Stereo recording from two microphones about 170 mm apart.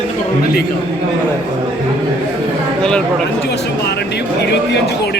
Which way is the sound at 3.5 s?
75° left (ahead or behind).